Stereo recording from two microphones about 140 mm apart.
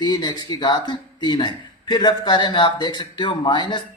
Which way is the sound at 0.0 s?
30° left (ahead or behind).